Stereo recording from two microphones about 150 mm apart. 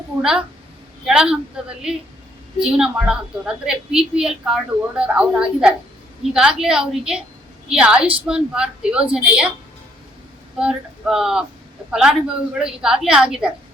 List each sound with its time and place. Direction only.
0.2 s a woman's voice: 5° right (ahead or behind)
10.6 s a woman's voice: 5° right (ahead or behind)